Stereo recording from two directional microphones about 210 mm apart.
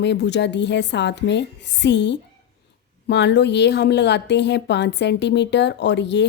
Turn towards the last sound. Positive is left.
turn(degrees=55)  # may be behind; listen again after turning